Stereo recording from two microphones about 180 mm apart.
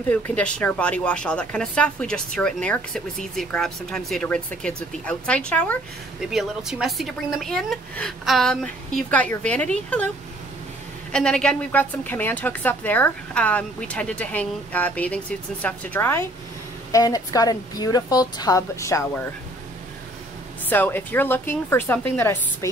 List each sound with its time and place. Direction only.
0.1 s a woman's voice: 5° left (ahead or behind)
11.1 s a woman's voice: 5° left (ahead or behind)
20.7 s a woman's voice: 10° left (ahead or behind)